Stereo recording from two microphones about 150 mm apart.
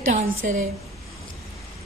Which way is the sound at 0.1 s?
50° right (ahead or behind).